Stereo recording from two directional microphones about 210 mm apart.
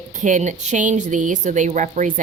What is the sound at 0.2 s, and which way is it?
Speech, 35° right (ahead or behind).